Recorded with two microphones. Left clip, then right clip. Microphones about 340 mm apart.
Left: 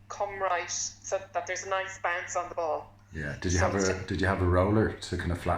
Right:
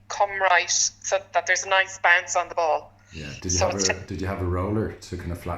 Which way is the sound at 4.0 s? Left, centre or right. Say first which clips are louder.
Left 2 dB; centre.